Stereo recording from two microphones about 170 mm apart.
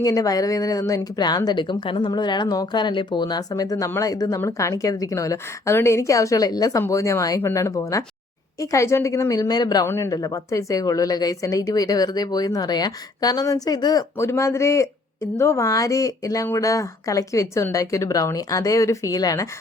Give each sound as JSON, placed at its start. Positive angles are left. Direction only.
{"t": 0.0, "sound": "speech", "side_deg": 20}